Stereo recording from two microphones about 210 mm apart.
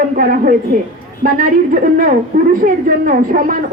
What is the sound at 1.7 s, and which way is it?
A woman's voice, 40° right (ahead or behind).